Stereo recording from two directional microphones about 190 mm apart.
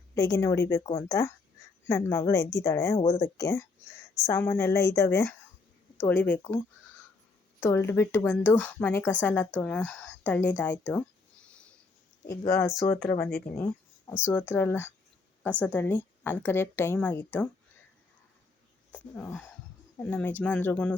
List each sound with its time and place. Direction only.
0.1 s a woman's voice: 15° left (ahead or behind)
7.6 s a woman's voice: 15° left (ahead or behind)
11.4 s a sound: 5° left (ahead or behind)
12.2 s a woman's voice: 15° left (ahead or behind)
18.9 s a woman's voice: 5° left (ahead or behind)